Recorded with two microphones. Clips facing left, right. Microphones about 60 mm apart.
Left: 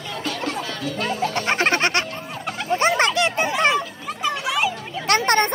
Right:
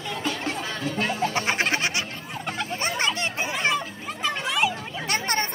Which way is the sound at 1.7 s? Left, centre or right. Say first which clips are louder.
Left 5 dB; left.